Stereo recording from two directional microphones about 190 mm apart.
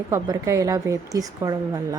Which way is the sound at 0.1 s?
15° right (ahead or behind).